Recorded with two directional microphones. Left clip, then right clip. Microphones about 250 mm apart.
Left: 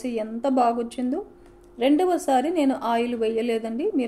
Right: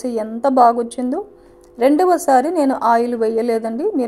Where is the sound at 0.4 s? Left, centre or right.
Right.